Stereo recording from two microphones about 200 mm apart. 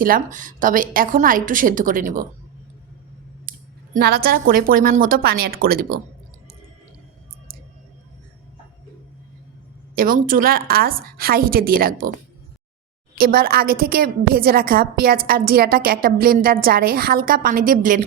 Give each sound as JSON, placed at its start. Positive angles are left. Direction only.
{"t": 0.0, "sound": "a woman's voice", "side_deg": -40}
{"t": 3.9, "sound": "a woman's voice", "side_deg": -50}
{"t": 9.9, "sound": "a woman's voice", "side_deg": -45}
{"t": 13.1, "sound": "a woman's voice", "side_deg": -45}